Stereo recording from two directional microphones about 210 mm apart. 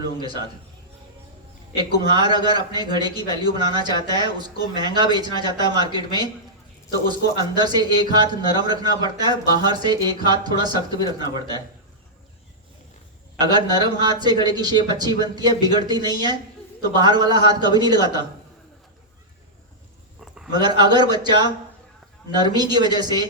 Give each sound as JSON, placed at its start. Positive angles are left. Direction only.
{"t": 0.0, "sound": "a man's voice", "side_deg": -20}
{"t": 1.7, "sound": "speech", "side_deg": -20}
{"t": 13.4, "sound": "speech", "side_deg": -20}
{"t": 20.5, "sound": "speech", "side_deg": -20}